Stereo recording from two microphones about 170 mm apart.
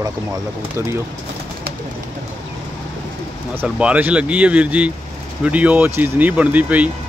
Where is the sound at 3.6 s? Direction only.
10° right (ahead or behind).